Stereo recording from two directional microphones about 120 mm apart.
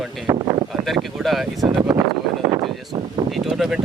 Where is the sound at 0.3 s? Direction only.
25° right (ahead or behind).